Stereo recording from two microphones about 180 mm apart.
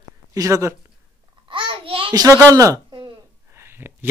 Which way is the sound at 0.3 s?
15° right (ahead or behind).